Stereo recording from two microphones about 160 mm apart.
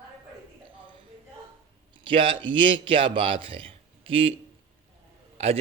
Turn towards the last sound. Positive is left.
turn(degrees=-40)  # may be behind; listen again after turning